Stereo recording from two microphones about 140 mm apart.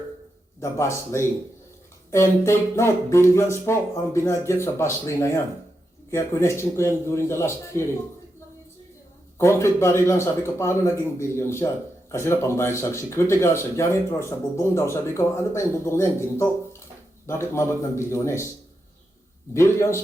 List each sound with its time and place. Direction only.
0.6 s speech: 20° left (ahead or behind)
9.4 s speech: 20° left (ahead or behind)
19.5 s speech: 20° left (ahead or behind)